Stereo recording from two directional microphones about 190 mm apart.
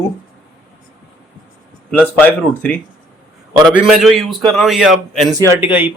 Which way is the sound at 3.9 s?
Centre (ahead or behind).